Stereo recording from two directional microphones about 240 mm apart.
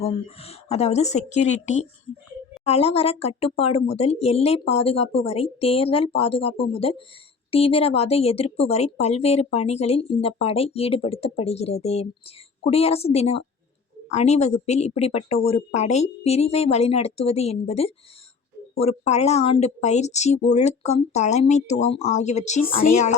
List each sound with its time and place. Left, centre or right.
0.0 s speech: left